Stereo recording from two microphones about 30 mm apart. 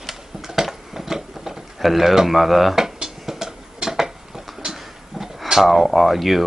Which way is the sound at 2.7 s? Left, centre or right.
Centre.